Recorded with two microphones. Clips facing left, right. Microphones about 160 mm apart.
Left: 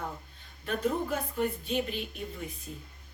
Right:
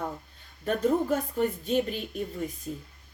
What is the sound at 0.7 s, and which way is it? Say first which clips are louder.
A woman's voice: right 5 dB; 40° right (ahead or behind).